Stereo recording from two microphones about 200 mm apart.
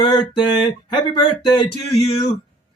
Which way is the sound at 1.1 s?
25° left (ahead or behind).